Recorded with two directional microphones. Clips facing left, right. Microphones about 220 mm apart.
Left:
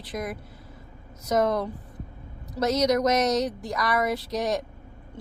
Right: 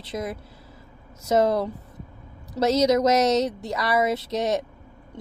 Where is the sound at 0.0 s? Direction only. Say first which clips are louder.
Right 2 dB; 25° right (ahead or behind).